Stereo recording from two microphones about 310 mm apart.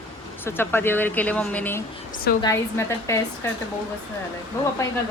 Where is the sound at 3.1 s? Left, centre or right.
Centre.